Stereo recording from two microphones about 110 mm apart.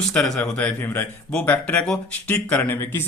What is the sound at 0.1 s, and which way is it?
A man's voice, 10° left (ahead or behind).